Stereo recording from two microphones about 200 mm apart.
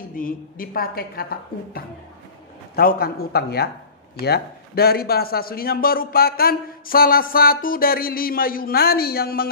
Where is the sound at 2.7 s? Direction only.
50° left (ahead or behind).